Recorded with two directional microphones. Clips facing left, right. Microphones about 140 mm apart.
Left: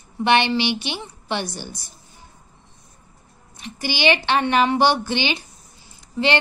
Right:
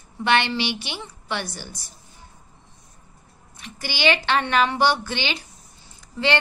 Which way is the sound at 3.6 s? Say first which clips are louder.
Left 2 dB; 20° left (ahead or behind).